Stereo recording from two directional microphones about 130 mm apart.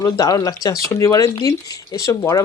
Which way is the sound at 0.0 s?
25° left (ahead or behind).